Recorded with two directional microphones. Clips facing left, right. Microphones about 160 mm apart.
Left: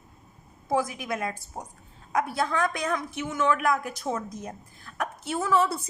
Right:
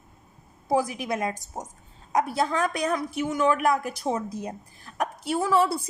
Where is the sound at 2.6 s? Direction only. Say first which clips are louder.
Right 2 dB; 15° right (ahead or behind).